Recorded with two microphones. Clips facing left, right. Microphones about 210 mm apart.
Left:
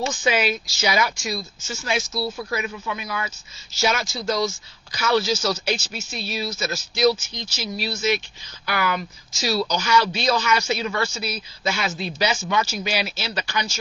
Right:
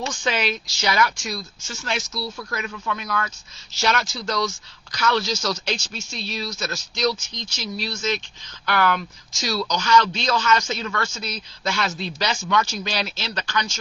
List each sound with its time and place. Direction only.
0.1 s a man's voice: 5° left (ahead or behind)